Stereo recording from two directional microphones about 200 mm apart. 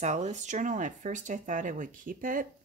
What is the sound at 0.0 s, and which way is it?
Speech, 35° right (ahead or behind).